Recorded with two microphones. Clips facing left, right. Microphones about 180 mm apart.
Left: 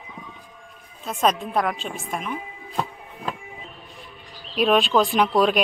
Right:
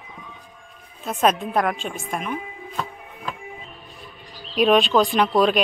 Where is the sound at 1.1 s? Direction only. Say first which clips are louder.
Right 2 dB; 5° right (ahead or behind).